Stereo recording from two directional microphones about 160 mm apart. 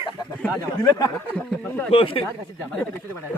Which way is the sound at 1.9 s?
35° left (ahead or behind).